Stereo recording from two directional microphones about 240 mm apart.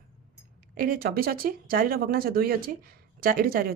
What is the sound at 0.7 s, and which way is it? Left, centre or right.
A woman's voice, right.